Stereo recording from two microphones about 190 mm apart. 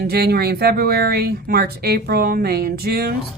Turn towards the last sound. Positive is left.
turn(degrees=-55)  # may be behind; listen again after turning